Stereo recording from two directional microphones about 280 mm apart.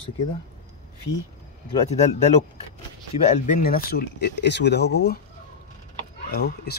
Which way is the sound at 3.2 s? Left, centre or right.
Left.